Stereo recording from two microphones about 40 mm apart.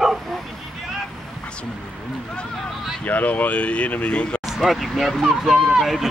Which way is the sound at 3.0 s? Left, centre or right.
Left.